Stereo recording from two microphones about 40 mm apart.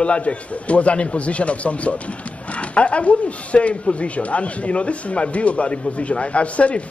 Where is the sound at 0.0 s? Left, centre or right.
Left.